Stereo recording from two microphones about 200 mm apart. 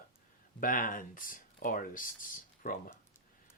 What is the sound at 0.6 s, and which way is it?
Speech, 45° left (ahead or behind).